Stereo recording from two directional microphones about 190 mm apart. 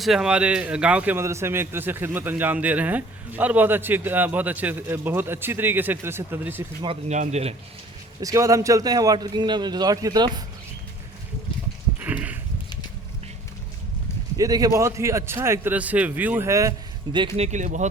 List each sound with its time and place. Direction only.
0.0 s a man's voice: centre (ahead or behind)
6.8 s speech: 35° right (ahead or behind)
8.2 s a man's voice: 15° right (ahead or behind)
11.9 s a sound: 10° right (ahead or behind)
14.3 s a man's voice: 20° right (ahead or behind)
17.3 s speech: 35° right (ahead or behind)